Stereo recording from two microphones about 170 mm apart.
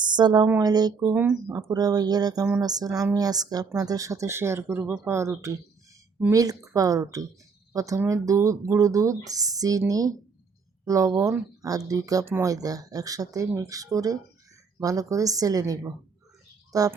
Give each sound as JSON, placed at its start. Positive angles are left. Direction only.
{"t": 0.0, "sound": "speech", "side_deg": -25}